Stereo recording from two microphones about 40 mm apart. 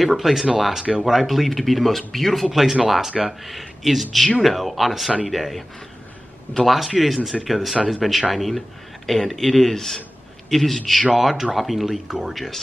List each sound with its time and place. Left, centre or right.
0.0 s speech: centre
2.5 s speech: centre
6.6 s speech: centre
11.1 s speech: centre